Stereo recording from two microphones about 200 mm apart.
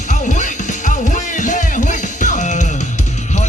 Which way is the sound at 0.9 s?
40° left (ahead or behind).